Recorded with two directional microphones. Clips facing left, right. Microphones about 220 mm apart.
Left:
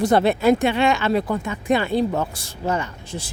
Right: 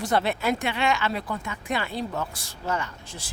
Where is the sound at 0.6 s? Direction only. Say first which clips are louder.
Left 7 dB; 25° left (ahead or behind).